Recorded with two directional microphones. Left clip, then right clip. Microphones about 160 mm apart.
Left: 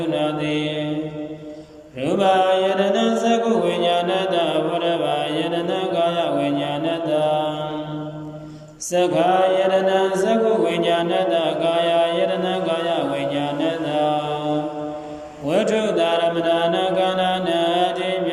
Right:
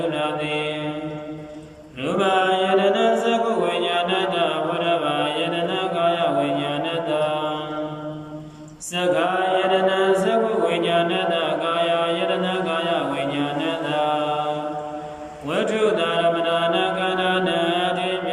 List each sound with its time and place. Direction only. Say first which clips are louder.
0.1 s mantra: left 2 dB; 35° left (ahead or behind)
2.0 s mantra: left 3 dB; 30° left (ahead or behind)
8.9 s mantra: left 3 dB; 35° left (ahead or behind)
15.4 s mantra: left 1 dB; 35° left (ahead or behind)